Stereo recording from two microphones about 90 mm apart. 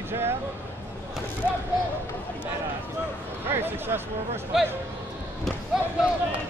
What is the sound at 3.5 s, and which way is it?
Speech, 25° right (ahead or behind).